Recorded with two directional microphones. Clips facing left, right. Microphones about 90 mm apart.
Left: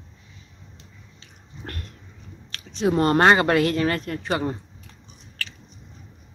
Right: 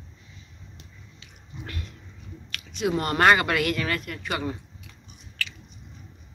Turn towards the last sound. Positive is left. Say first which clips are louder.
# right 1 dB
turn(degrees=35)  # may be behind; listen again after turning